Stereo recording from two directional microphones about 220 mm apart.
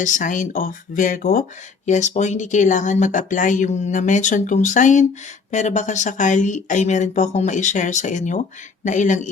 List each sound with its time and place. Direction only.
0.0 s speech: 35° left (ahead or behind)